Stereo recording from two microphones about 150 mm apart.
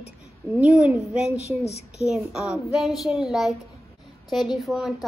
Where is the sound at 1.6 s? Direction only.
45° left (ahead or behind).